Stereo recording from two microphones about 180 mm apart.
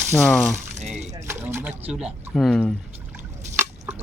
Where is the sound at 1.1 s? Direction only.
15° right (ahead or behind).